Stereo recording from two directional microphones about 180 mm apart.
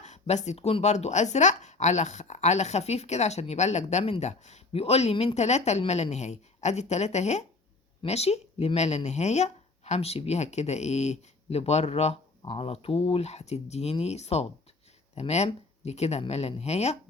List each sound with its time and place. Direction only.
0.0 s speech: 40° left (ahead or behind)